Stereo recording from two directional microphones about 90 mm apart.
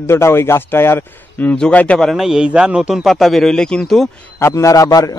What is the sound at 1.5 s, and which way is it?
Speech, 15° left (ahead or behind).